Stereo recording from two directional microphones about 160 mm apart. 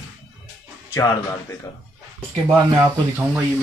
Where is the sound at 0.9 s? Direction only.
15° left (ahead or behind).